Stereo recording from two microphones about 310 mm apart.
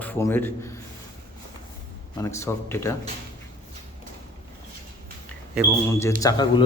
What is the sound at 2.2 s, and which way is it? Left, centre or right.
Speech, centre.